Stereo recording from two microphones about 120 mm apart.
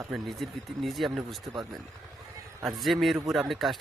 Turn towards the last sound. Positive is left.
turn(degrees=0)  # may be behind; listen again after turning